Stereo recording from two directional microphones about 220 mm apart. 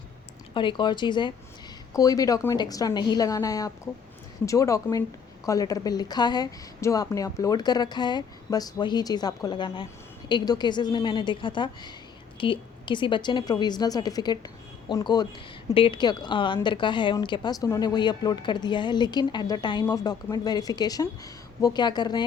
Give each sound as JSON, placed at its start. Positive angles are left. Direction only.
{"t": 0.5, "sound": "speech", "side_deg": 20}